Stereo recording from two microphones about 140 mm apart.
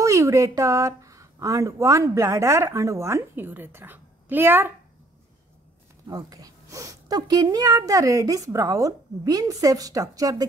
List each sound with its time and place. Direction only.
0.0 s speech: 20° right (ahead or behind)
6.0 s speech: 25° right (ahead or behind)